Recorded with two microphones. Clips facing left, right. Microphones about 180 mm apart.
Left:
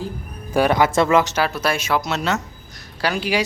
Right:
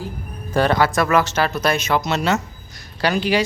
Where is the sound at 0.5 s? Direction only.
10° left (ahead or behind).